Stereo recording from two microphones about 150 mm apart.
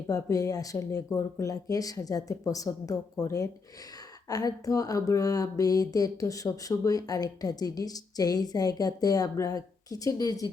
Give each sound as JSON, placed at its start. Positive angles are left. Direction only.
{"t": 0.1, "sound": "speech", "side_deg": 20}